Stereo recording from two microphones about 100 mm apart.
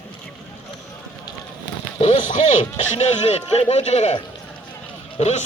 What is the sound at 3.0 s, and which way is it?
Speech, 90° left.